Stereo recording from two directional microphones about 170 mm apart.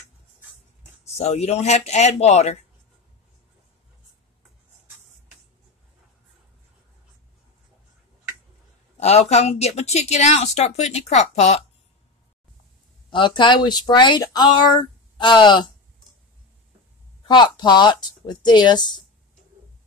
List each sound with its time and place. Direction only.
1.0 s a woman's voice: 40° left (ahead or behind)
8.9 s a woman's voice: 40° left (ahead or behind)
13.1 s speech: 30° left (ahead or behind)
17.3 s speech: 25° left (ahead or behind)